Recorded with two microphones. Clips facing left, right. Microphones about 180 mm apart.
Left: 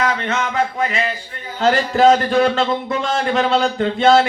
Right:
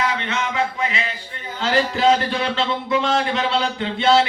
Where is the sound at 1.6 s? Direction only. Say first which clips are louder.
Left 4 dB; 45° left (ahead or behind).